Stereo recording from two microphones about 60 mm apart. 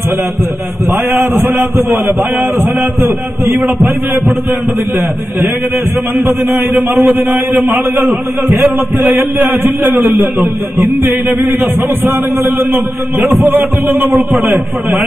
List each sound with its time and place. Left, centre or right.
0.8 s a man's voice: right
6.1 s a man's voice: right